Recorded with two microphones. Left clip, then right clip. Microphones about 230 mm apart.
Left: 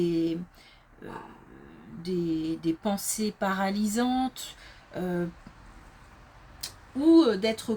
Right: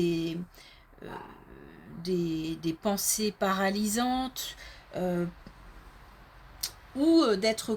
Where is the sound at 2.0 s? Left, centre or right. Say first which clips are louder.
Left 1 dB; right.